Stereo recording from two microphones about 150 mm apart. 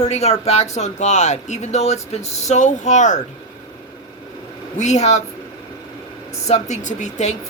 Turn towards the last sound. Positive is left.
turn(degrees=50)  # may be behind; listen again after turning